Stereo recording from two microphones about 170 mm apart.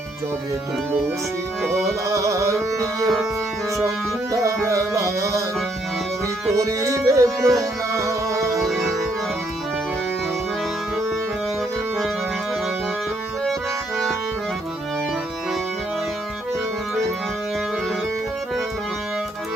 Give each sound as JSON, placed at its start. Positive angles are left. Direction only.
{"t": 2.0, "sound": "music", "side_deg": -20}
{"t": 6.6, "sound": "music", "side_deg": -20}